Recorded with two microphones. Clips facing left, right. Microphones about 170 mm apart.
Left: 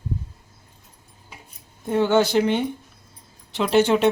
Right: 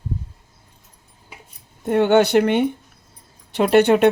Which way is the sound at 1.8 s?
65° right (ahead or behind).